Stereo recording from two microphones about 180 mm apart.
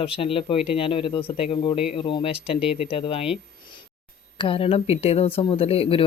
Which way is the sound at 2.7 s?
35° left (ahead or behind).